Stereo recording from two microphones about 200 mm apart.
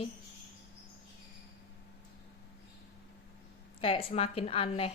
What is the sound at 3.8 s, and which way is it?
A woman's voice, 30° left (ahead or behind).